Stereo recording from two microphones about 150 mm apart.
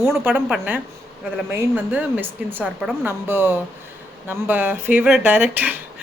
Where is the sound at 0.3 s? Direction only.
5° right (ahead or behind).